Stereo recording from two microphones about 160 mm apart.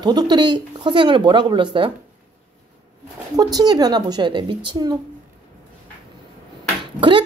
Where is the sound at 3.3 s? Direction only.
25° right (ahead or behind).